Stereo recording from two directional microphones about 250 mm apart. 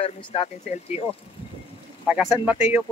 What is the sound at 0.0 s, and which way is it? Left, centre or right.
Speech, left.